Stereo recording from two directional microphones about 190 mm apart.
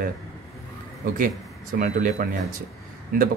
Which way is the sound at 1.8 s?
45° right (ahead or behind).